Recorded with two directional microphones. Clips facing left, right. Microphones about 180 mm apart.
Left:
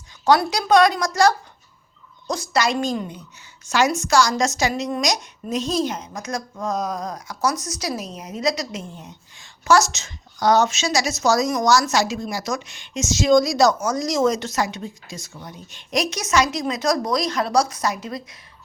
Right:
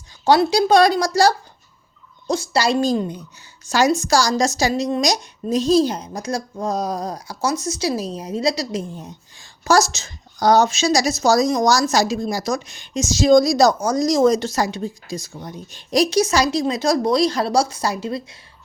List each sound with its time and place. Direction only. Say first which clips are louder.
0.3 s a woman's voice: right 3 dB; 30° right (ahead or behind)